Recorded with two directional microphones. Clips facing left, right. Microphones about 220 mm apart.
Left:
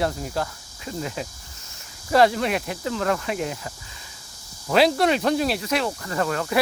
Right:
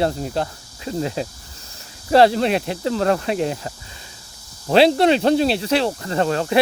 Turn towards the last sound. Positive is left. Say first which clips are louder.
# right 5 dB
turn(degrees=-30)  # may be behind; listen again after turning